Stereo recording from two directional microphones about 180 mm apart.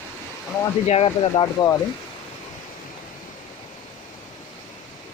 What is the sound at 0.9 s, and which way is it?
Speech, 30° left (ahead or behind).